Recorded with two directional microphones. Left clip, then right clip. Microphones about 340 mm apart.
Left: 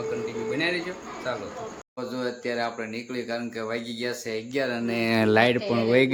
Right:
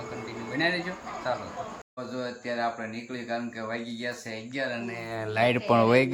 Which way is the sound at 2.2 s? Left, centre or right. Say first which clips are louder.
Left 1 dB; centre.